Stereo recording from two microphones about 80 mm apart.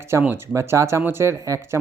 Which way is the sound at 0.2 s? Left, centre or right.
Right.